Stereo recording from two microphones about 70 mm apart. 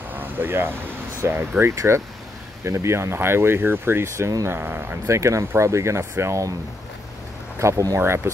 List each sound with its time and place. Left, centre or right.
0.1 s a sound: right
1.6 s speech: right
5.0 s speech: right
7.5 s speech: right